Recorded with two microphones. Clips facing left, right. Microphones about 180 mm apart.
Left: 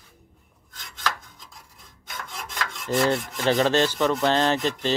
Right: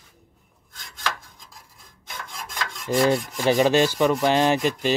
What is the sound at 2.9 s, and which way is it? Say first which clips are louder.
Rub: right 2 dB; 10° right (ahead or behind).